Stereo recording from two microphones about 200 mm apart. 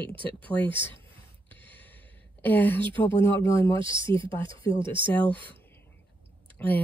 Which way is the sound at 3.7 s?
25° right (ahead or behind).